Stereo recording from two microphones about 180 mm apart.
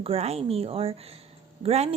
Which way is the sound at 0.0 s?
35° right (ahead or behind).